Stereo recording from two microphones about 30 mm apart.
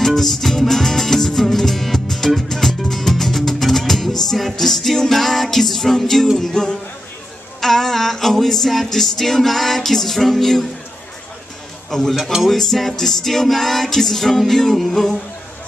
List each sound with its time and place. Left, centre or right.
0.0 s music: centre
6.5 s speech: centre
7.6 s music: centre
11.9 s music: centre